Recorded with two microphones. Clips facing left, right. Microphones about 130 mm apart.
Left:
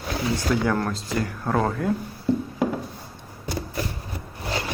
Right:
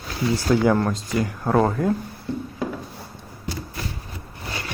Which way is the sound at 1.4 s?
5° right (ahead or behind).